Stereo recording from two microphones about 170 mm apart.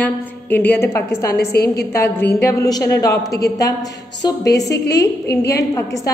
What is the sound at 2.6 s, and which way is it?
A woman's voice, 20° left (ahead or behind).